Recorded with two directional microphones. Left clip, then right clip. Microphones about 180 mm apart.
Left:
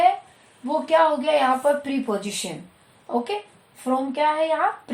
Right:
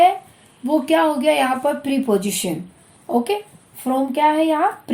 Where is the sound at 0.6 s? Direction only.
50° right (ahead or behind).